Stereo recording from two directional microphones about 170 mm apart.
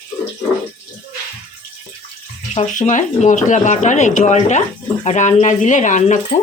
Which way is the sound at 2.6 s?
45° left (ahead or behind).